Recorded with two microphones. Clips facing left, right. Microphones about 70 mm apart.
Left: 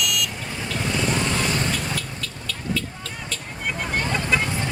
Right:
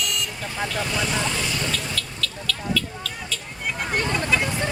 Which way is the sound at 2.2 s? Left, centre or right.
Left.